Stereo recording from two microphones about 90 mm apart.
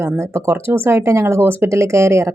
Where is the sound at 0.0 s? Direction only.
30° right (ahead or behind).